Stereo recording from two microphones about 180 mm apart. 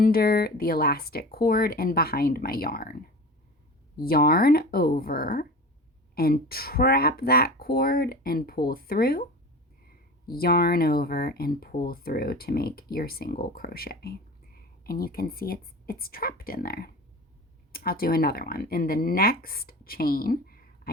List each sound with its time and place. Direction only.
0.0 s speech: 55° left (ahead or behind)
4.0 s speech: 55° left (ahead or behind)
10.3 s speech: 55° left (ahead or behind)